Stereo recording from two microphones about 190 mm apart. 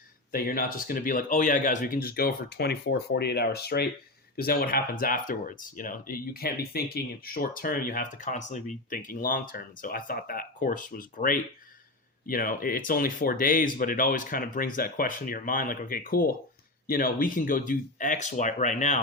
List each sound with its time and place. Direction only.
0.3 s speech: 50° left (ahead or behind)